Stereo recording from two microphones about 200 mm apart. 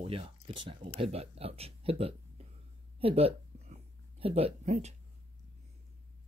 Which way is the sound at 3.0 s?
30° right (ahead or behind).